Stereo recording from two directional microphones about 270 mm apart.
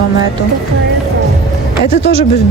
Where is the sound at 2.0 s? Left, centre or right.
Right.